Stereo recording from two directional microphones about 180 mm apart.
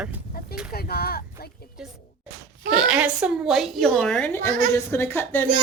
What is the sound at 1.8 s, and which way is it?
A woman's voice, 5° right (ahead or behind).